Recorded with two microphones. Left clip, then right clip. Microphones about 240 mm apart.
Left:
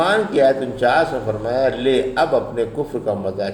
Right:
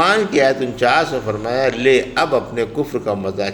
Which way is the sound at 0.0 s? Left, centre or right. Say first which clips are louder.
Right 1 dB; right.